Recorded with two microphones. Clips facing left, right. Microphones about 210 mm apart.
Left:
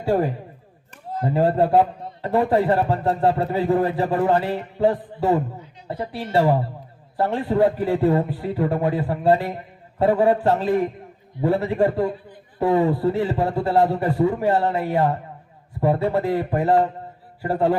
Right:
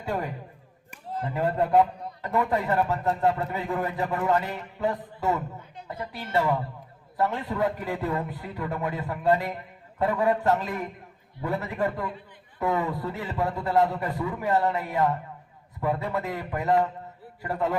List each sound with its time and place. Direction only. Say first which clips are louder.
0.0 s a man's voice: left 10 dB; 30° left (ahead or behind)